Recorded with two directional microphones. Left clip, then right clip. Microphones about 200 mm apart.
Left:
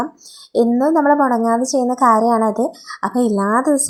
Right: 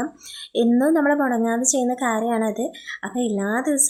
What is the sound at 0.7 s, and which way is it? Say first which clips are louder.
A woman's voice: left 3 dB; 20° right (ahead or behind).